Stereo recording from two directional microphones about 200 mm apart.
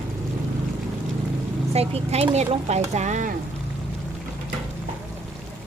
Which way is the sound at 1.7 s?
30° right (ahead or behind).